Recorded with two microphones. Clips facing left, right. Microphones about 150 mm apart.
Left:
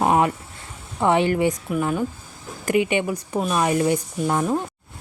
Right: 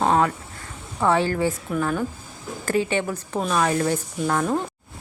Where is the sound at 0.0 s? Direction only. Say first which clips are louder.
Left 1 dB; 15° left (ahead or behind).